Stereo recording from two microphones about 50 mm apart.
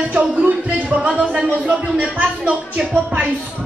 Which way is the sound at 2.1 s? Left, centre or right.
Right.